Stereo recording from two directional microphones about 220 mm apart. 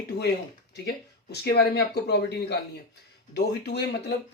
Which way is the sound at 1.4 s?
45° left (ahead or behind).